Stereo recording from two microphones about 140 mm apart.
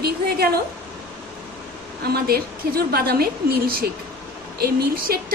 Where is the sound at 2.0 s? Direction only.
90° right.